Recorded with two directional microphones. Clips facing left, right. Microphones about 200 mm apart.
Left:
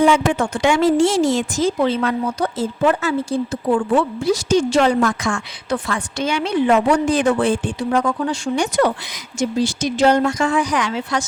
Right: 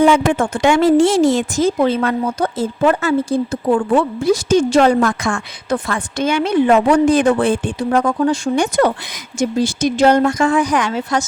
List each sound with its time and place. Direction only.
0.3 s a woman's voice: 55° right (ahead or behind)